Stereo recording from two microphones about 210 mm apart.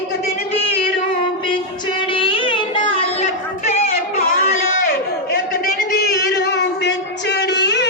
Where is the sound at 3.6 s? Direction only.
30° left (ahead or behind).